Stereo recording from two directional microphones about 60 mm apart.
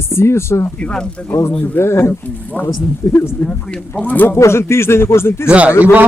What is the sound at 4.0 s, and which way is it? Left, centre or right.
Speech, left.